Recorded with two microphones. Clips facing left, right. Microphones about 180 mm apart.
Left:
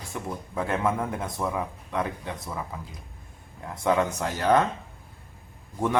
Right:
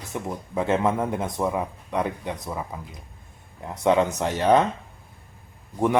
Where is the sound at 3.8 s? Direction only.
20° right (ahead or behind).